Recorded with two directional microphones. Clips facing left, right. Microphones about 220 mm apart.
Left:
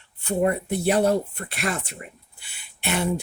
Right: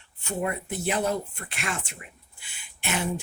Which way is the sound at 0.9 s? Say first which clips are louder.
Left 7 dB; 35° left (ahead or behind).